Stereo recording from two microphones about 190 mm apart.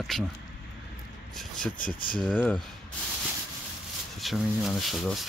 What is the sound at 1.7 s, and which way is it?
Speech, 45° left (ahead or behind).